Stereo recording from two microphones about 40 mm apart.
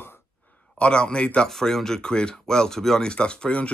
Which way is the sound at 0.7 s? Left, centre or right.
Left.